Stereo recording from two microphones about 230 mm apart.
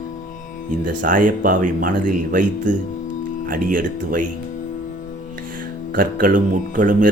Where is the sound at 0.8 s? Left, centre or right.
Right.